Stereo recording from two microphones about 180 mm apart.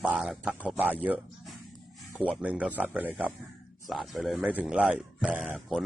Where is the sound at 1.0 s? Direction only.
10° right (ahead or behind).